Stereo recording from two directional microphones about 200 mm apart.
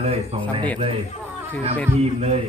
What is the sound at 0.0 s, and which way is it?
Speech, 30° right (ahead or behind).